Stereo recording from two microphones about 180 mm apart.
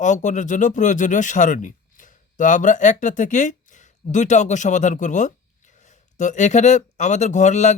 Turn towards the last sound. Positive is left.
turn(degrees=40)  # may be behind; listen again after turning